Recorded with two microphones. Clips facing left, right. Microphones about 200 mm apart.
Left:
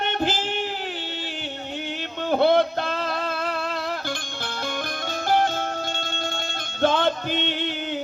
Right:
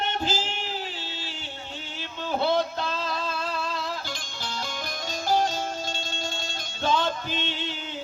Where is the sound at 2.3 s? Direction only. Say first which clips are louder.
Left 6 dB; 60° left (ahead or behind).